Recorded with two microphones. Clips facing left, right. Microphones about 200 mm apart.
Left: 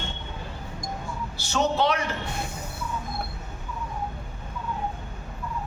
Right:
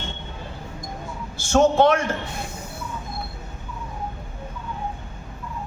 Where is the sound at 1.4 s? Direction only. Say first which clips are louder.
Right 8 dB; 50° right (ahead or behind).